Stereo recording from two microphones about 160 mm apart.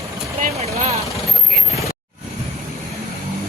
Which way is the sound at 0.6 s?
40° right (ahead or behind).